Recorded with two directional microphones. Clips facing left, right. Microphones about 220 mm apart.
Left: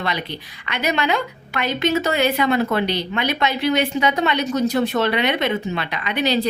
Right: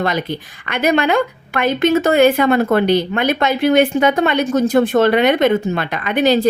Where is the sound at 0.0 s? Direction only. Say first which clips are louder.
Right 7 dB; 45° right (ahead or behind).